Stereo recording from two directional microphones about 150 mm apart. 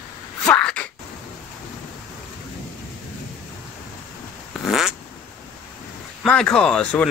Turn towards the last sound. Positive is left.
turn(degrees=5)  # may be behind; listen again after turning